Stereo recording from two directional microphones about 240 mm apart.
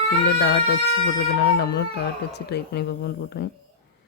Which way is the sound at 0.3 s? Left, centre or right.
Left.